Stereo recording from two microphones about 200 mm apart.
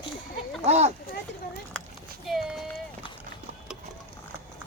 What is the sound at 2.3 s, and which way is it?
Run, centre (ahead or behind).